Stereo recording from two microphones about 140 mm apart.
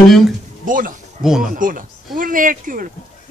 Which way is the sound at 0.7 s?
75° right (ahead or behind).